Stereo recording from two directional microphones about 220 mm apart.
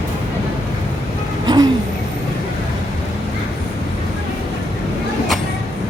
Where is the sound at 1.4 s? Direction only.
20° right (ahead or behind).